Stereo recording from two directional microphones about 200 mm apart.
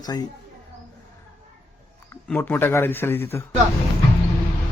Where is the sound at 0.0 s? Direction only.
20° left (ahead or behind).